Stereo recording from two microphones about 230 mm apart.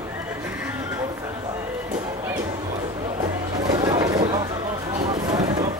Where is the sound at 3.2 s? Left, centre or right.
Centre.